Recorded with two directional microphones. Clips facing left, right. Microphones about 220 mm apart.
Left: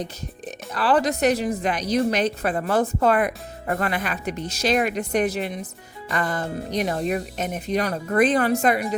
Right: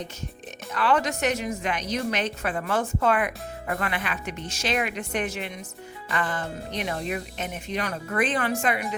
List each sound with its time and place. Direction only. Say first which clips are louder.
0.0 s speech: left 4 dB; 35° left (ahead or behind)